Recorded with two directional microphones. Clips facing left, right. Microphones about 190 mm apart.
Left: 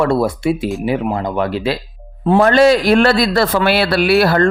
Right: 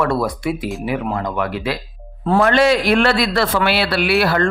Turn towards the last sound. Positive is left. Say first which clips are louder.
# left 4 dB
turn(degrees=35)  # may be behind; listen again after turning